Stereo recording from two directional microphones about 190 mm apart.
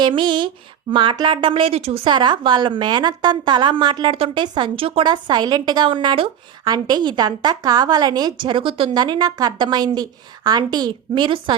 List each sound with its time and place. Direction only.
0.0 s speech: 25° right (ahead or behind)